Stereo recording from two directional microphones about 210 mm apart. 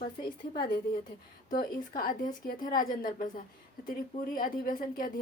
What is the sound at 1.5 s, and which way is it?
A woman's voice, 40° left (ahead or behind).